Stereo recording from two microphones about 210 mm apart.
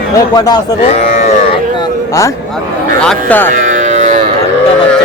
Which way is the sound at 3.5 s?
40° right (ahead or behind).